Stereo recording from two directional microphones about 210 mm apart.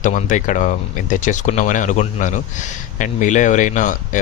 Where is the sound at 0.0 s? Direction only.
35° left (ahead or behind).